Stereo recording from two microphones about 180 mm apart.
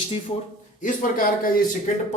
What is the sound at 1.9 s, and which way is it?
Speech, 45° left (ahead or behind).